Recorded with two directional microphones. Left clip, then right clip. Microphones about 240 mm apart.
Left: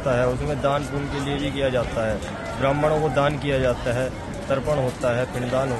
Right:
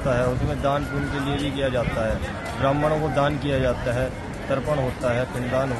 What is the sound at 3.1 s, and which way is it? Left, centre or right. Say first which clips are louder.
Speech: left 1 dB; left.